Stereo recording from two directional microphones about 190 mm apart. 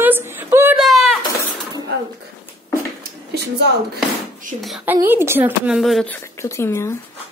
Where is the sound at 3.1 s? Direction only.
60° right (ahead or behind).